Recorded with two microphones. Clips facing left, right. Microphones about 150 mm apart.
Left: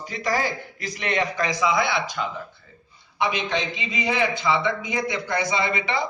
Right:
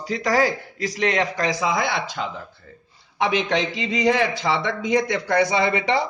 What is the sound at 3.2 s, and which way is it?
A man's voice, 85° right.